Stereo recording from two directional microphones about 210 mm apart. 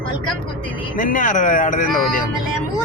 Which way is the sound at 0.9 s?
40° left (ahead or behind).